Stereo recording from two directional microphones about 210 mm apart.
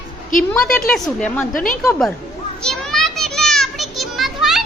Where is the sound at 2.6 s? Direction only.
Centre (ahead or behind).